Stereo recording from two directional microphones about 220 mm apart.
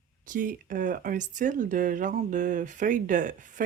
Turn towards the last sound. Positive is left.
turn(degrees=-35)  # may be behind; listen again after turning